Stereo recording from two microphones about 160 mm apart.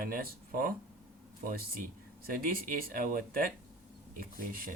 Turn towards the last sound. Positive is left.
turn(degrees=-60)  # may be behind; listen again after turning